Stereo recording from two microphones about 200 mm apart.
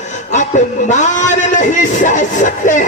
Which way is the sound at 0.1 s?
35° left (ahead or behind).